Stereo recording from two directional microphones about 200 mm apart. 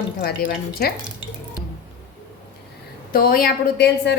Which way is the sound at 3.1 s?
45° left (ahead or behind).